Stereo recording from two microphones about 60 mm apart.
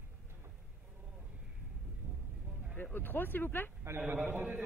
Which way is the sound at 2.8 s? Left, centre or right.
Left.